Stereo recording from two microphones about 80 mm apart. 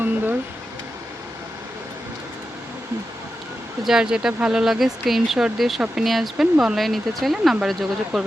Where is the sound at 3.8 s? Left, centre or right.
Centre.